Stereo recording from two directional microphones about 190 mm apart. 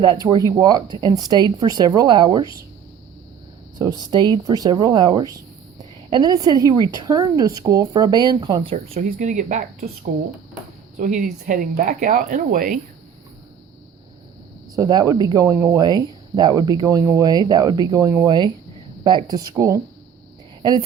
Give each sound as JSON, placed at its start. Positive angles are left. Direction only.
{"t": 0.0, "sound": "speech", "side_deg": -20}
{"t": 3.8, "sound": "speech", "side_deg": -20}
{"t": 8.7, "sound": "speech", "side_deg": -40}
{"t": 14.8, "sound": "speech", "side_deg": -20}